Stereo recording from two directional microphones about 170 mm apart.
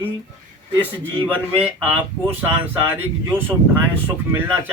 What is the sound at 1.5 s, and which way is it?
Speech, 10° right (ahead or behind).